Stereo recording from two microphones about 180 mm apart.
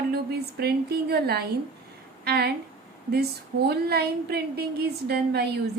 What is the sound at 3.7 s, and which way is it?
A woman's voice, 65° right (ahead or behind).